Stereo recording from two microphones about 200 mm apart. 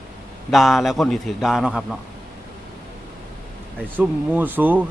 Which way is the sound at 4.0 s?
10° right (ahead or behind).